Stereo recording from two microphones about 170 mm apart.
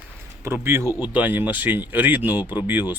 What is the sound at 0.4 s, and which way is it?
Speech, 15° right (ahead or behind).